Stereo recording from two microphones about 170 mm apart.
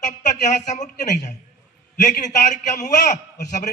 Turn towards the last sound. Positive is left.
turn(degrees=45)  # may be behind; listen again after turning